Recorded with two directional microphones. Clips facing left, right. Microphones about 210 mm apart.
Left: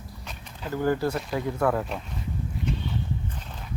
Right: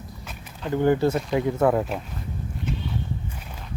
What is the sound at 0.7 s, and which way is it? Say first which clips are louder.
Speech: right 5 dB; 20° right (ahead or behind).